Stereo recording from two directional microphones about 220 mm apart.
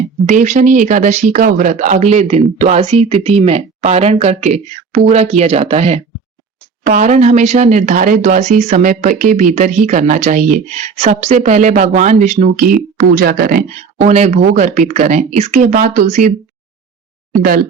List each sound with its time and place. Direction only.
0.3 s speech: 35° right (ahead or behind)